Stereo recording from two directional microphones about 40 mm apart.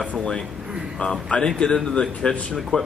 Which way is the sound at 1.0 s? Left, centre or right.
Left.